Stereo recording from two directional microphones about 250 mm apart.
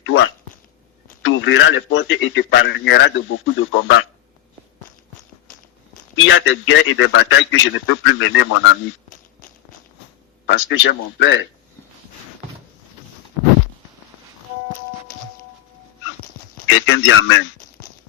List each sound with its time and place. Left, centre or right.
0.0 s a sound: left
1.2 s a man's voice: left
6.2 s a man's voice: left
10.4 s a man's voice: left
16.6 s a man's voice: left